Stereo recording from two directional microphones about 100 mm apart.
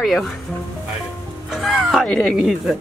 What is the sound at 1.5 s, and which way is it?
Music, centre (ahead or behind).